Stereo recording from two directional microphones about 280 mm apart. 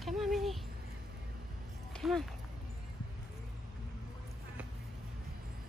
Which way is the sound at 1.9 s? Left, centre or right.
Centre.